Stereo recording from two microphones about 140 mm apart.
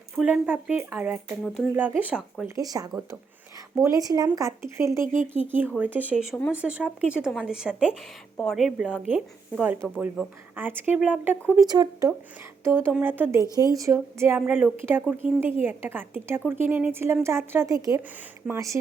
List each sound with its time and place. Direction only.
0.2 s speech: 10° right (ahead or behind)
1.5 s speech: centre (ahead or behind)
1.7 s speech: 15° right (ahead or behind)
2.6 s speech: 25° right (ahead or behind)
11.6 s speech: 30° right (ahead or behind)